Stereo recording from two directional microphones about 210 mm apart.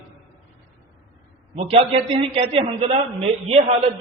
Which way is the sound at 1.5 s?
30° right (ahead or behind).